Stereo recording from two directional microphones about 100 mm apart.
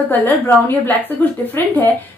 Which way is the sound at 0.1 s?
20° left (ahead or behind).